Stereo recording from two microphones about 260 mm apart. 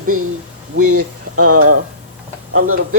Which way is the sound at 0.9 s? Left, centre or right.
Right.